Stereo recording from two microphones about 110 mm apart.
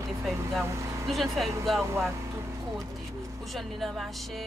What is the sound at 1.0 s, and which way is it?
Speech, centre (ahead or behind).